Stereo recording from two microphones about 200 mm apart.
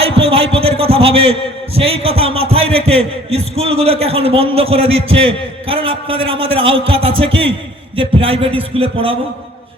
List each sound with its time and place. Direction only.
0.0 s a man's voice: 30° right (ahead or behind)